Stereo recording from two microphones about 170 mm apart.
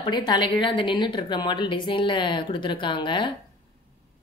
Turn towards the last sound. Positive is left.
turn(degrees=30)  # may be behind; listen again after turning